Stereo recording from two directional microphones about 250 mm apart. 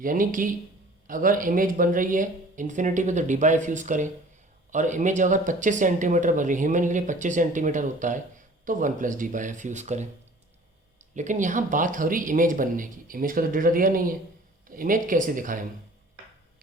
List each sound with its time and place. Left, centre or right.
0.0 s speech: right
11.1 s speech: right